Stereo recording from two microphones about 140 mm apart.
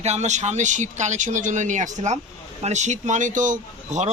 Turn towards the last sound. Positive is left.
turn(degrees=-60)  # may be behind; listen again after turning